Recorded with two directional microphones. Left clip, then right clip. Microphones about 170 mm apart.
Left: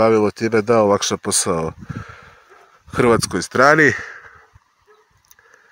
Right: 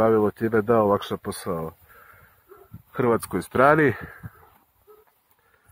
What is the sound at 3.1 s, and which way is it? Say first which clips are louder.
Speech: left 6 dB; 20° left (ahead or behind).